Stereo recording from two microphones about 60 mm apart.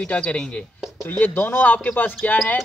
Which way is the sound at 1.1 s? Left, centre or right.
Left.